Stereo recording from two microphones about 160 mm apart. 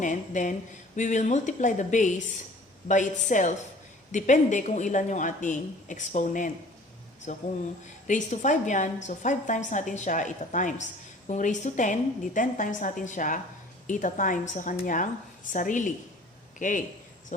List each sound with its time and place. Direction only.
0.0 s a woman's voice: 50° left (ahead or behind)